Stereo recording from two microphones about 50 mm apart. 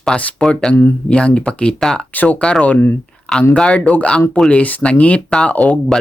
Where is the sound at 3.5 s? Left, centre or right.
Left.